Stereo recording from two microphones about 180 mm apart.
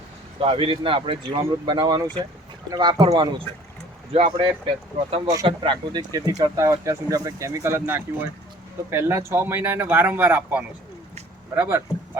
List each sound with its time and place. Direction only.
0.3 s speech: 30° right (ahead or behind)
5.3 s speech: 25° right (ahead or behind)